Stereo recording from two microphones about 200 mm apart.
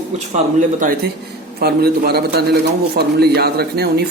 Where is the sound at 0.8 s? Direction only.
45° right (ahead or behind).